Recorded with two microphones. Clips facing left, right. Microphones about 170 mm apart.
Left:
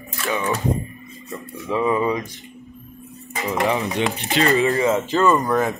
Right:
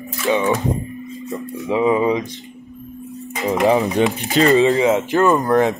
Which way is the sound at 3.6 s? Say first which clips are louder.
Right 6 dB; 35° right (ahead or behind).